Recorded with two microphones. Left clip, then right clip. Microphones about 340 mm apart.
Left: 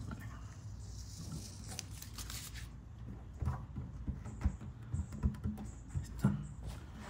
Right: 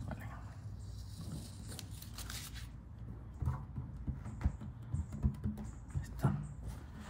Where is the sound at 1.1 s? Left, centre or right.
Centre.